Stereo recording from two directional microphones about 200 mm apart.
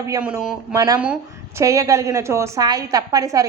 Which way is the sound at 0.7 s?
20° right (ahead or behind).